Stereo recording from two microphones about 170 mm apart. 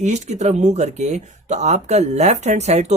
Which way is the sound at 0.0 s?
45° right (ahead or behind).